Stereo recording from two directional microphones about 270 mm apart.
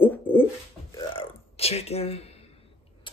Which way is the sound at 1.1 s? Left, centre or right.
Left.